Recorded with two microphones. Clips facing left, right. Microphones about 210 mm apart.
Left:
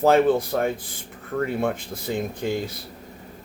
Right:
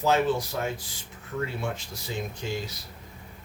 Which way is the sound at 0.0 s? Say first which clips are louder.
Left 7 dB; 55° left (ahead or behind).